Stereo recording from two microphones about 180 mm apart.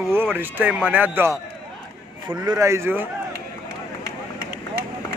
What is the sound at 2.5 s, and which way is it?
Speech, 15° right (ahead or behind).